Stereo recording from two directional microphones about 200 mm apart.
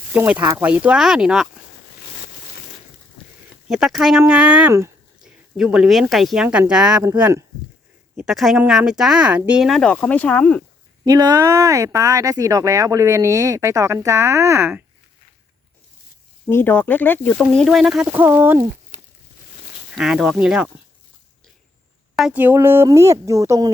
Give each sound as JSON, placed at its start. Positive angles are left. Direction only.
{"t": 0.1, "sound": "speech", "side_deg": -5}
{"t": 3.7, "sound": "speech", "side_deg": 0}
{"t": 8.1, "sound": "speech", "side_deg": 0}
{"t": 11.0, "sound": "speech", "side_deg": -20}
{"t": 16.5, "sound": "speech", "side_deg": 10}
{"t": 20.0, "sound": "speech", "side_deg": -5}
{"t": 22.1, "sound": "speech", "side_deg": -5}